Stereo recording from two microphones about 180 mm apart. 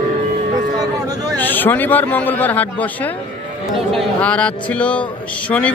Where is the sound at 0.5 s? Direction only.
20° right (ahead or behind).